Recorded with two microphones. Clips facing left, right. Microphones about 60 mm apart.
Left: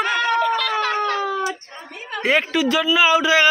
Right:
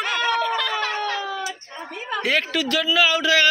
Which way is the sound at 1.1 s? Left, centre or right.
Left.